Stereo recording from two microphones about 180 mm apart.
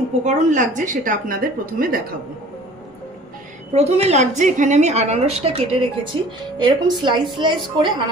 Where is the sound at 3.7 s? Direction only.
40° right (ahead or behind).